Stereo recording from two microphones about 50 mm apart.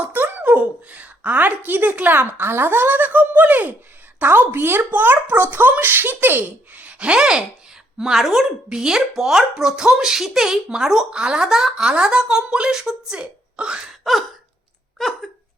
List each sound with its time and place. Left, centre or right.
0.1 s a sound: right
0.6 s a woman's voice: right
4.9 s speech: right
6.8 s speech: right
13.1 s speech: right
14.0 s hiccup: centre